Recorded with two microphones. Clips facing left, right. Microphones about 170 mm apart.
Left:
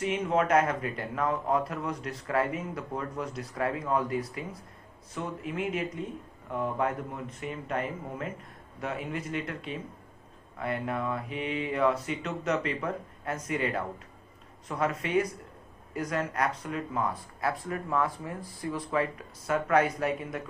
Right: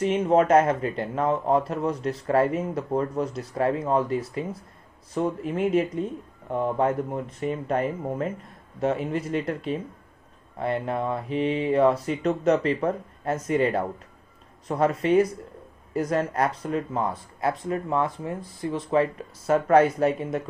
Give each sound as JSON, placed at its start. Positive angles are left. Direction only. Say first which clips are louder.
{"t": 0.0, "sound": "speech", "louder": "right 7 dB", "side_deg": -35}